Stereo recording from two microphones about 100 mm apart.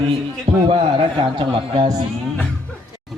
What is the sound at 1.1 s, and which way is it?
Speech, 55° right (ahead or behind).